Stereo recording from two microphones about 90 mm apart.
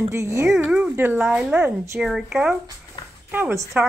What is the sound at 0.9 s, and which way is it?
Speech, 20° right (ahead or behind).